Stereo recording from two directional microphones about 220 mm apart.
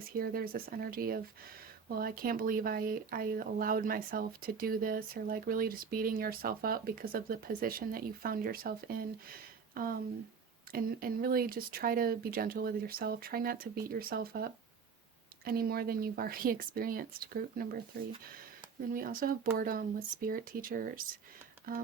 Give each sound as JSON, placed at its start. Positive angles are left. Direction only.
{"t": 0.2, "sound": "speech", "side_deg": -45}
{"t": 15.4, "sound": "speech", "side_deg": -45}
{"t": 18.9, "sound": "speech", "side_deg": -40}